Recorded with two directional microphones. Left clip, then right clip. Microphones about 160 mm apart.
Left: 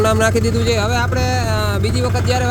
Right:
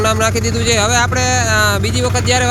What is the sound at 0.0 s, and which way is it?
Speech, 15° left (ahead or behind).